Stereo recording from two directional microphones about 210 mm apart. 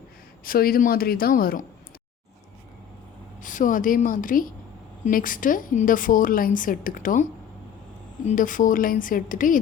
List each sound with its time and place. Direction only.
0.4 s speech: 45° left (ahead or behind)
3.4 s a woman's voice: 40° left (ahead or behind)
8.3 s a woman's voice: 40° left (ahead or behind)